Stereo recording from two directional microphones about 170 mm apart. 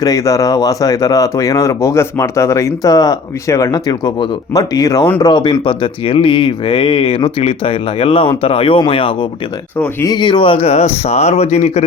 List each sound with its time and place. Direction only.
0.0 s speech: 20° left (ahead or behind)
9.7 s speech: 10° left (ahead or behind)
10.1 s speech: 25° left (ahead or behind)